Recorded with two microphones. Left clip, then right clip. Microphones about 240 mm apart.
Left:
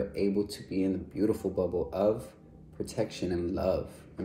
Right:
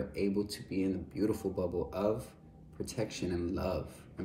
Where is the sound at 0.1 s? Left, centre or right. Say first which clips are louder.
Left 4 dB; centre.